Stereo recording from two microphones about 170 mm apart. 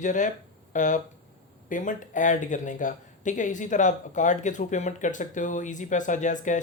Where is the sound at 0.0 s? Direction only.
45° left (ahead or behind).